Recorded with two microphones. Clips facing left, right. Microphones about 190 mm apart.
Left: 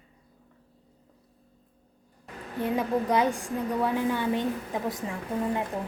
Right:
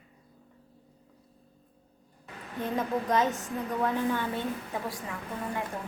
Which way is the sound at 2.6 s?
10° left (ahead or behind).